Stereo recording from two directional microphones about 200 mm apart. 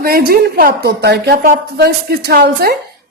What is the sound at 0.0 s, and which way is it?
A woman's voice, 50° right (ahead or behind).